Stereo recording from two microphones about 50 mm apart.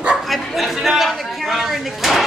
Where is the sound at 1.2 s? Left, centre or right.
Centre.